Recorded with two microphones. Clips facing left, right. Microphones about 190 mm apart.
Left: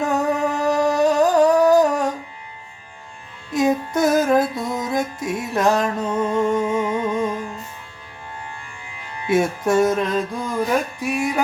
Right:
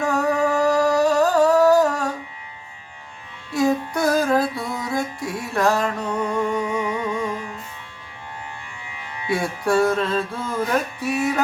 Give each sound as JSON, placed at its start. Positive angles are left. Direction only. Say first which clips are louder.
{"t": 0.0, "sound": "music", "louder": "even", "side_deg": 20}
{"t": 3.5, "sound": "music", "louder": "left 1 dB", "side_deg": 20}
{"t": 9.2, "sound": "music", "louder": "left 4 dB", "side_deg": 20}